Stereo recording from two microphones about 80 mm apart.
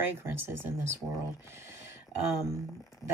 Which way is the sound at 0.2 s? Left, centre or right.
Right.